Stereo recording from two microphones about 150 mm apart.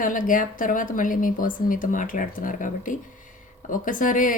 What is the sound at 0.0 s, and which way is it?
A woman's voice, 60° left (ahead or behind).